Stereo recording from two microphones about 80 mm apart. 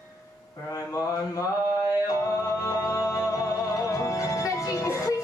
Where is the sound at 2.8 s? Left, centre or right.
Left.